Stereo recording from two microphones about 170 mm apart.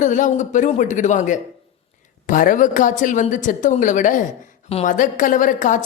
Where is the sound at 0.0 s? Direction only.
45° left (ahead or behind).